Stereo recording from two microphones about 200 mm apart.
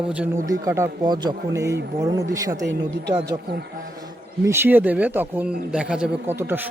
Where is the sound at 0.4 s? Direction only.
15° right (ahead or behind).